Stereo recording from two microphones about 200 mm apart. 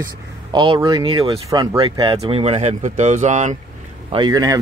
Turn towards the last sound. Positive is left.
turn(degrees=-20)  # may be behind; listen again after turning